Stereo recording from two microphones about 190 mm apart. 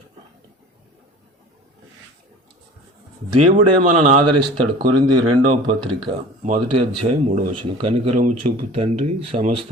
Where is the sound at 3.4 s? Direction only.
40° right (ahead or behind).